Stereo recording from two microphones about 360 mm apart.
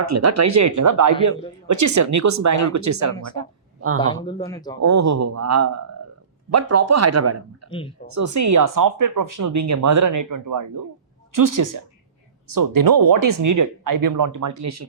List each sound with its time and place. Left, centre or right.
0.0 s speech: right
4.0 s speech: centre
4.8 s speech: right